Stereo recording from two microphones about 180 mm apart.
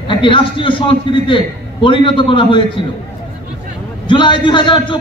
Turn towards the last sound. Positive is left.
turn(degrees=25)  # may be behind; listen again after turning